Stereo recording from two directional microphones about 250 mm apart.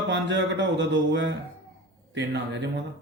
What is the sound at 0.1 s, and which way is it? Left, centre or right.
Speech, right.